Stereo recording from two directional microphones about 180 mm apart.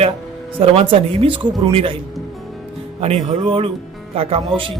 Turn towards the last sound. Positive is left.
turn(degrees=-30)  # may be behind; listen again after turning